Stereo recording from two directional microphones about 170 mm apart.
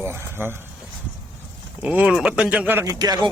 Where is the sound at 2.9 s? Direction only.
25° right (ahead or behind).